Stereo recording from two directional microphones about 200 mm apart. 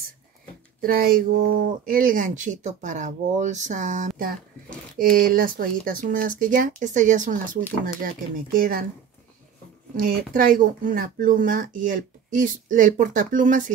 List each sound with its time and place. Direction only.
0.7 s speech: 45° right (ahead or behind)
8.5 s speech: 45° right (ahead or behind)
9.9 s speech: 45° right (ahead or behind)